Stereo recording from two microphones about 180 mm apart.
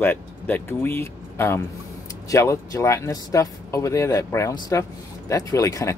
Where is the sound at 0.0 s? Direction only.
10° left (ahead or behind).